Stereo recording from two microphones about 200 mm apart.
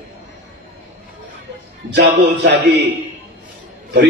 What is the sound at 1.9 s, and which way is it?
Speech, 60° right (ahead or behind).